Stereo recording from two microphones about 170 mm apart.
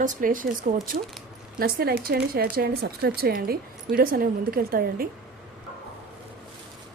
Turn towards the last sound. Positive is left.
turn(degrees=-60)  # may be behind; listen again after turning